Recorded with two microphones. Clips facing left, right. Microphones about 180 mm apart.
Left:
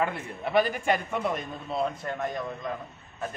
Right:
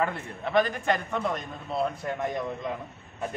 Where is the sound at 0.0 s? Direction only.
10° left (ahead or behind).